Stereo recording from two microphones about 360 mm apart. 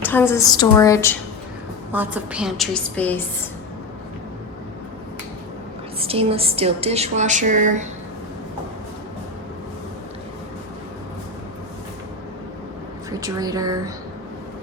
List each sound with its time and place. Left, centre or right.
0.0 s a woman's voice: centre
1.9 s a woman's voice: centre
6.0 s speech: centre
13.1 s speech: centre